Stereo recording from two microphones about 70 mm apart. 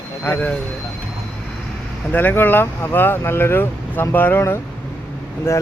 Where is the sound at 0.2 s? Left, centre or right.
Left.